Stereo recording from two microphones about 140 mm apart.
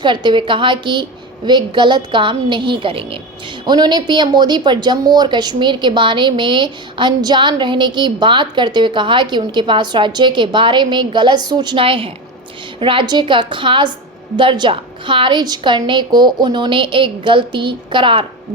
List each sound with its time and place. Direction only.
0.0 s a woman's voice: 35° right (ahead or behind)